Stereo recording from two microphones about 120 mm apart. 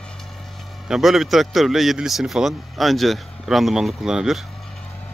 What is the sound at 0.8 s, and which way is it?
Speech, 5° right (ahead or behind).